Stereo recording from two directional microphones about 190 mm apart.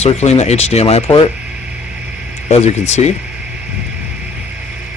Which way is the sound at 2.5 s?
35° left (ahead or behind).